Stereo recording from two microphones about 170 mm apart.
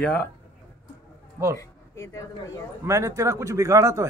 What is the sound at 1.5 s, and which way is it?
Speech, 20° left (ahead or behind).